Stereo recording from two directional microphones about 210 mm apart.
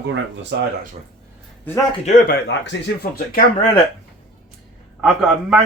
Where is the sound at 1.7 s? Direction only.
10° left (ahead or behind).